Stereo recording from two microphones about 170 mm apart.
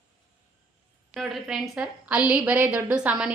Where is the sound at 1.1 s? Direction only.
Centre (ahead or behind).